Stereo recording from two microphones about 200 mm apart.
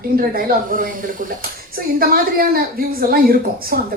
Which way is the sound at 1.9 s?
45° right (ahead or behind).